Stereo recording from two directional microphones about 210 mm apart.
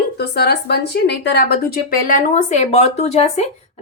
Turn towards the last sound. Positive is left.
turn(degrees=30)  # may be behind; listen again after turning